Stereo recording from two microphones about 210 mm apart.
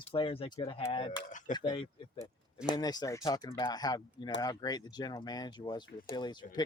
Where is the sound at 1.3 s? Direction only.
35° left (ahead or behind).